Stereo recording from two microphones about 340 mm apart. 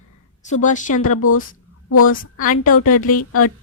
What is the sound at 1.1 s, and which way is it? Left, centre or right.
Speech, left.